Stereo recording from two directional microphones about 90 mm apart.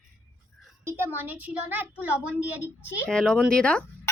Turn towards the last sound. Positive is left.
turn(degrees=10)  # may be behind; listen again after turning